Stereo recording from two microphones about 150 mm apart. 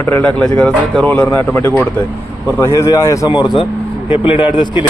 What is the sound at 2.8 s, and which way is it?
A man's voice, 25° left (ahead or behind).